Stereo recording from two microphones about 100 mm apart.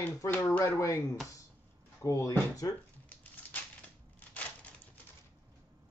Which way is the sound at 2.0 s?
35° left (ahead or behind).